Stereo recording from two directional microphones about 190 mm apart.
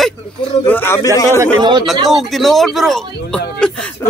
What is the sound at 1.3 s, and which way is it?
Speech, 20° right (ahead or behind).